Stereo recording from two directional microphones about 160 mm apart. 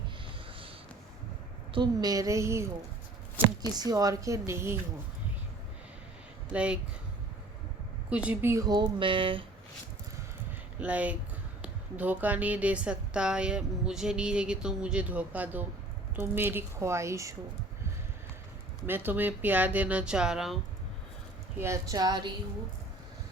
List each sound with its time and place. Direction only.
1.7 s speech: 25° right (ahead or behind)
3.7 s speech: 25° right (ahead or behind)
6.5 s speech: 5° right (ahead or behind)
8.1 s speech: 10° right (ahead or behind); by 9.4 s 30° right (ahead or behind)
10.8 s speech: 10° right (ahead or behind)
18.9 s speech: 10° right (ahead or behind)
21.6 s speech: 20° right (ahead or behind)